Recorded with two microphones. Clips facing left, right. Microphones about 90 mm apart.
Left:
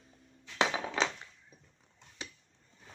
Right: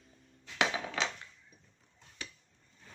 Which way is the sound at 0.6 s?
30° left (ahead or behind).